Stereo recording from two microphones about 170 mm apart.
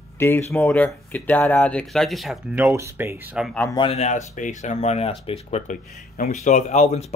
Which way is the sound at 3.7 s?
30° left (ahead or behind).